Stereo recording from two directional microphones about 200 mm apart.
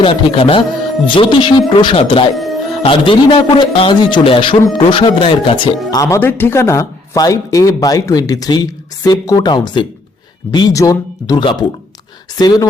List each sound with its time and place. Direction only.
0.0 s a man's voice: 25° left (ahead or behind)
2.3 s music: centre (ahead or behind)
2.8 s a man's voice: 25° left (ahead or behind)
6.0 s a man's voice: 15° left (ahead or behind)